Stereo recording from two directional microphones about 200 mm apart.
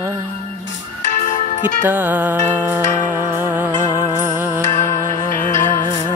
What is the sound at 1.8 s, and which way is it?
Music, 10° right (ahead or behind).